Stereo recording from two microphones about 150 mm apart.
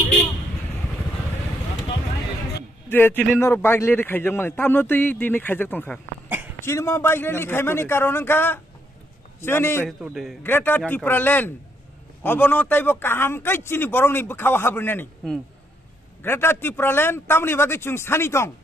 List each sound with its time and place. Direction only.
2.9 s speech: 15° left (ahead or behind)
6.2 s throat clearing: 10° right (ahead or behind)
6.6 s speech: 15° left (ahead or behind)
9.8 s a man's voice: centre (ahead or behind)
10.4 s speech: 15° left (ahead or behind)
10.8 s a man's voice: centre (ahead or behind)
11.1 s speech: 15° left (ahead or behind)
16.2 s speech: 15° left (ahead or behind)